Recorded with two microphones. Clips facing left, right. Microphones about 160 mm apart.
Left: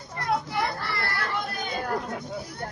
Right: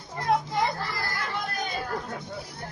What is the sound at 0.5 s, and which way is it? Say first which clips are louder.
Children playing: right 1 dB; 65° left (ahead or behind).